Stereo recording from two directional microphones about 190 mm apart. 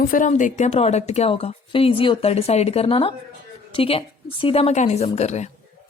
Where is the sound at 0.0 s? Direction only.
45° left (ahead or behind).